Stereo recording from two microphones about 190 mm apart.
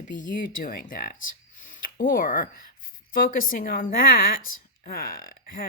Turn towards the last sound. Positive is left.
turn(degrees=45)  # may be behind; listen again after turning